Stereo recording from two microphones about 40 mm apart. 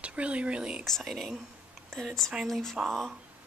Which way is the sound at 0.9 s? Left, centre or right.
Centre.